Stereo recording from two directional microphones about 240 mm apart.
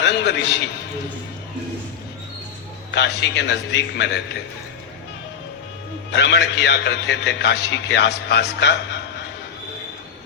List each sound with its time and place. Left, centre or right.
0.0 s a man's voice: left
2.9 s a man's voice: left
6.1 s a man's voice: left